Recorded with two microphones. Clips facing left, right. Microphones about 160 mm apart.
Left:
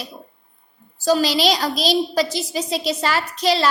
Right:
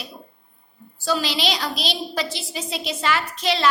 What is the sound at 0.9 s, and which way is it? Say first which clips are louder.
A woman's voice: left 6 dB; 40° left (ahead or behind).